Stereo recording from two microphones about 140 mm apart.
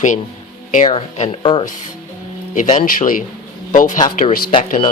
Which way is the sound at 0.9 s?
45° left (ahead or behind).